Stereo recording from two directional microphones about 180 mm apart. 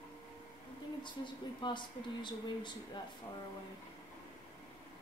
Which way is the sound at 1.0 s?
25° left (ahead or behind).